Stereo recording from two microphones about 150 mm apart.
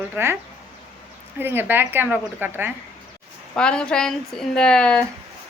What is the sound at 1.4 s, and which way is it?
Speech, 15° right (ahead or behind).